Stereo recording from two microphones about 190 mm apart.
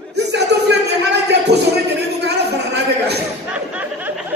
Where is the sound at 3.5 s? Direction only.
5° right (ahead or behind).